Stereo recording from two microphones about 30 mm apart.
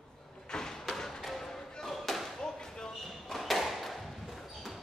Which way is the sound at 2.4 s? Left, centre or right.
Left.